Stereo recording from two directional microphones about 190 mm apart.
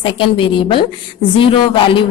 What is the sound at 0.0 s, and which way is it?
A woman's voice, 25° left (ahead or behind).